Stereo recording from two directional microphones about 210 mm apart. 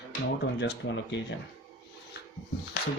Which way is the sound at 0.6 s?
55° left (ahead or behind).